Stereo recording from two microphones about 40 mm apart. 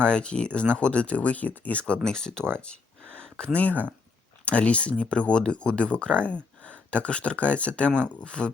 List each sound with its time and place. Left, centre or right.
0.0 s speech: left
2.0 s speech: centre